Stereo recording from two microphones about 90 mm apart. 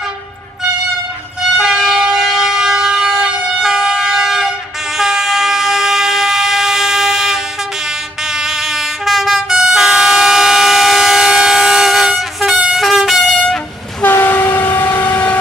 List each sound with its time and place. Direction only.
1.6 s train: 5° right (ahead or behind)
8.3 s vehicle: 5° right (ahead or behind)
14.0 s train: 25° left (ahead or behind)